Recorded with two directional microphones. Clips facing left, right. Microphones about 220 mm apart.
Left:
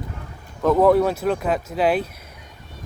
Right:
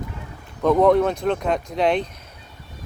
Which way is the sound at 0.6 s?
5° left (ahead or behind).